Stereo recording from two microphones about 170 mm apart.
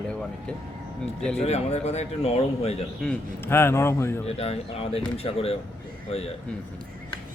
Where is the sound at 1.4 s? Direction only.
40° left (ahead or behind).